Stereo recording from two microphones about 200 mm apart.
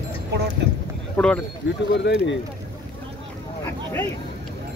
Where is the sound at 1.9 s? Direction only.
60° left (ahead or behind).